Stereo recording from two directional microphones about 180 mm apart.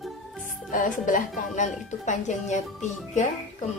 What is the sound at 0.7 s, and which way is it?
Speech, 50° left (ahead or behind).